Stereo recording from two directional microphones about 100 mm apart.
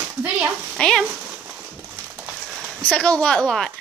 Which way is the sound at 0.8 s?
5° left (ahead or behind).